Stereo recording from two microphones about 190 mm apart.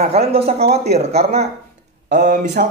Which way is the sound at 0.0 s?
35° right (ahead or behind).